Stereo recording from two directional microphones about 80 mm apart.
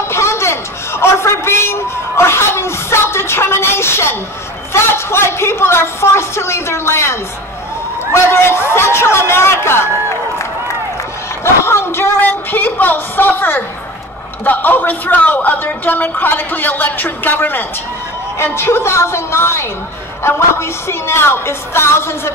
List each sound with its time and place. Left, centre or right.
0.1 s a sound: left
4.7 s a man's voice: left
11.4 s a man's voice: left